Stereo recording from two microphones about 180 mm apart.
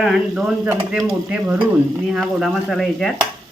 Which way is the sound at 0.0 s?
5° right (ahead or behind).